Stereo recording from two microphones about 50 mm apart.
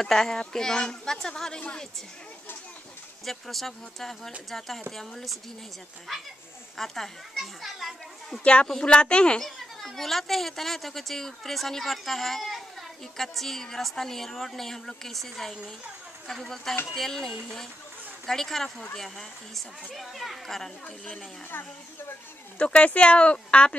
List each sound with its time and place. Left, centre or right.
0.0 s a woman's voice: centre
3.3 s speech: centre
6.8 s a child's voice: centre
8.6 s speech: centre
9.4 s speech: centre
16.9 s a woman's voice: centre
22.6 s speech: left